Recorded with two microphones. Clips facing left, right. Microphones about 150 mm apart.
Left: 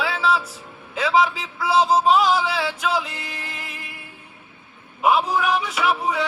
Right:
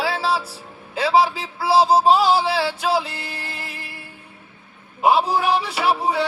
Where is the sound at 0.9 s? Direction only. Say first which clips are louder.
Right 2 dB; 35° right (ahead or behind).